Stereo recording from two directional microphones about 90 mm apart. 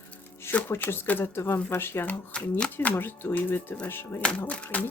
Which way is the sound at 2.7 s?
20° left (ahead or behind).